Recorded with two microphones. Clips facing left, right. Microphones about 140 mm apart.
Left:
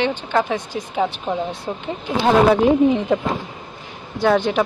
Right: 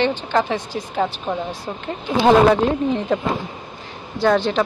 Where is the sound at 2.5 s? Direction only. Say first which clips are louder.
Left 4 dB; 5° left (ahead or behind).